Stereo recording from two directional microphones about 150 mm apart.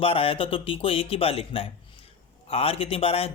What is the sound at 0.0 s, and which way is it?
Speech, 40° left (ahead or behind).